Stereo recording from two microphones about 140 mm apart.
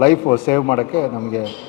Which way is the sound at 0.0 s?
15° left (ahead or behind).